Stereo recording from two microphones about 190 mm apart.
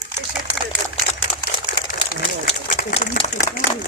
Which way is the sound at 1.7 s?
45° left (ahead or behind).